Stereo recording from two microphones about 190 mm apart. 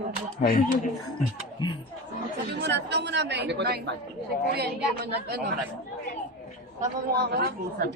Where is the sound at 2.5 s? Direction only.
60° right (ahead or behind).